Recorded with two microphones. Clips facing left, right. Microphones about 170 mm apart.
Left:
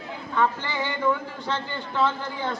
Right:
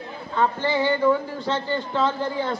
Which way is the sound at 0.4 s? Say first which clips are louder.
Right 4 dB; 40° right (ahead or behind).